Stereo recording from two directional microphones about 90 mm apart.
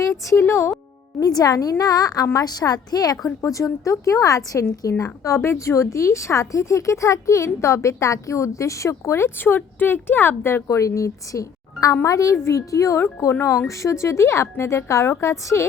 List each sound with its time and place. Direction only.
0.0 s a woman's voice: 35° left (ahead or behind)
1.2 s a woman's voice: 45° left (ahead or behind)